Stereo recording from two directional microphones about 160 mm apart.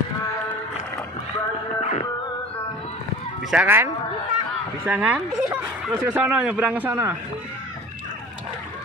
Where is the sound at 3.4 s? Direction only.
10° right (ahead or behind).